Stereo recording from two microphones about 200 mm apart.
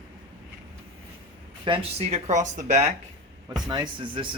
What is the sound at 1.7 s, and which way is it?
Speech, 30° right (ahead or behind).